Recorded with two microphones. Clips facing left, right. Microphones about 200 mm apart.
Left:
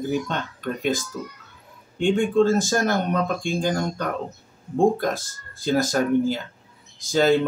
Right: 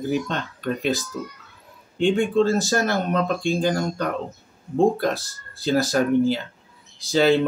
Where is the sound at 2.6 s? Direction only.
45° left (ahead or behind).